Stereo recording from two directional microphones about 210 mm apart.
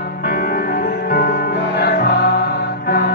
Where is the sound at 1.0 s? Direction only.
45° left (ahead or behind).